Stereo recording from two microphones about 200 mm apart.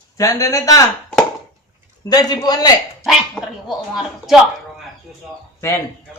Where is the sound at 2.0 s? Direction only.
20° left (ahead or behind).